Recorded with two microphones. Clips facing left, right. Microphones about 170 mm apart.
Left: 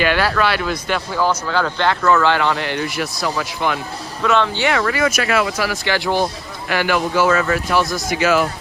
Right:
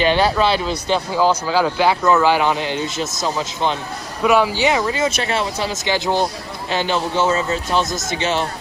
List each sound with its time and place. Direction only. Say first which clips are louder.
0.0 s speech: right 2 dB; 25° right (ahead or behind)